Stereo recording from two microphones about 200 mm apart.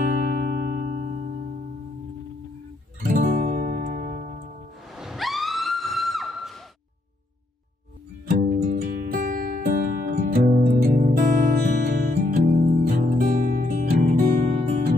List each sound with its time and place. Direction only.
0.0 s music: 45° right (ahead or behind)
3.0 s music: 40° right (ahead or behind)
4.9 s a sound: centre (ahead or behind)
8.3 s music: 45° right (ahead or behind)